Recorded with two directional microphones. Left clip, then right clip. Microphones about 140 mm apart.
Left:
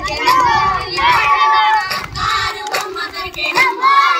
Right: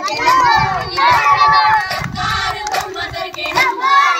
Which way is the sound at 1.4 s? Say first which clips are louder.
Right 1 dB; 30° left (ahead or behind).